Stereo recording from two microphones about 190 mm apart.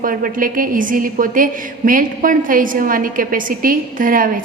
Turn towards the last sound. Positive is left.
turn(degrees=-45)  # may be behind; listen again after turning